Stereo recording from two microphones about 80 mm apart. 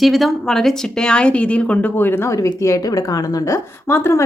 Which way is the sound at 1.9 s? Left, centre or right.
Left.